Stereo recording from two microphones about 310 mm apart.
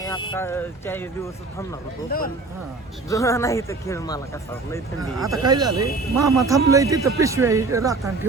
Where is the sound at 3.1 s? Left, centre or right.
Centre.